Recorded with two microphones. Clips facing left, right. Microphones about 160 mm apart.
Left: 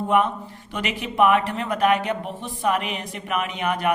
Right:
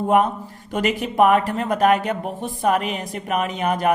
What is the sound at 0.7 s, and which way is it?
Speech, 45° right (ahead or behind).